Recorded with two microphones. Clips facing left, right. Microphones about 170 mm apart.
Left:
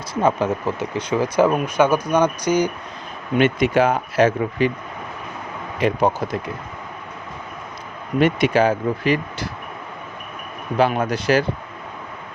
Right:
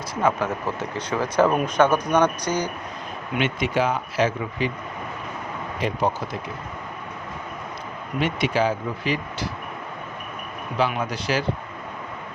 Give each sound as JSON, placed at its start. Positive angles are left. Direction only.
{"t": 0.2, "sound": "speech", "side_deg": 20}
{"t": 3.3, "sound": "speech", "side_deg": 45}
{"t": 5.8, "sound": "speech", "side_deg": 50}
{"t": 8.2, "sound": "speech", "side_deg": 50}
{"t": 10.8, "sound": "speech", "side_deg": 50}